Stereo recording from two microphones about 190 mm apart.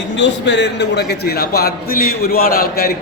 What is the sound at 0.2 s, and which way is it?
A man's voice, 70° left (ahead or behind).